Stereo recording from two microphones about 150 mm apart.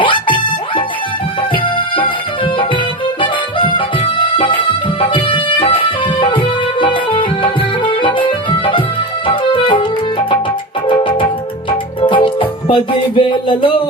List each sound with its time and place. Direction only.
0.0 s music: 35° left (ahead or behind)
1.4 s music: 35° left (ahead or behind)